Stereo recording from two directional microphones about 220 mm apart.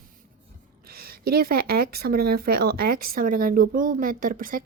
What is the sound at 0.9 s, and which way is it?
Speech, 45° right (ahead or behind).